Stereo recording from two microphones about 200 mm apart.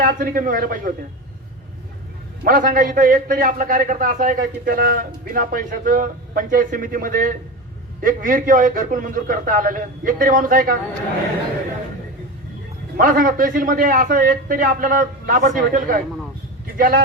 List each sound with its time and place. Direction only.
0.0 s a man's voice: 45° right (ahead or behind)
2.4 s a man's voice: 45° right (ahead or behind)
13.0 s a man's voice: 45° right (ahead or behind)